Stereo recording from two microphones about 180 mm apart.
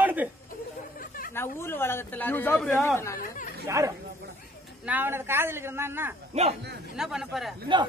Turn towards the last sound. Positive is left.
turn(degrees=0)  # may be behind; listen again after turning